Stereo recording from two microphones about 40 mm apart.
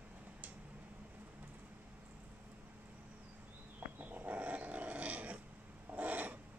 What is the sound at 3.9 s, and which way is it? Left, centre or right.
Dog, right.